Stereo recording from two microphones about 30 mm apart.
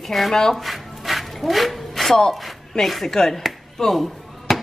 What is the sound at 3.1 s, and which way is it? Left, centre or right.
Speech, centre.